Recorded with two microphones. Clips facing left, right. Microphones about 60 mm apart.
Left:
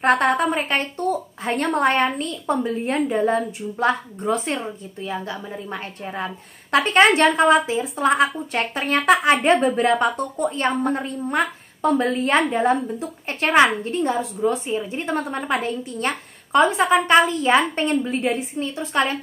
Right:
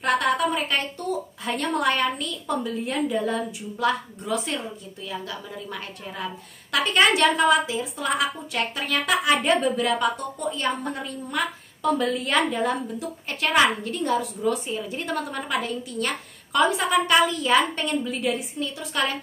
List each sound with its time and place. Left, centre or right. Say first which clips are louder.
0.0 s a woman's voice: left 4 dB; left